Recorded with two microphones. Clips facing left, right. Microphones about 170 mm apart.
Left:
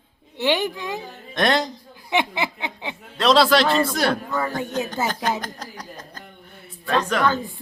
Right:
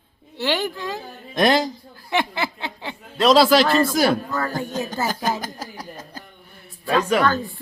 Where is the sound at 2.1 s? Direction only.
20° left (ahead or behind).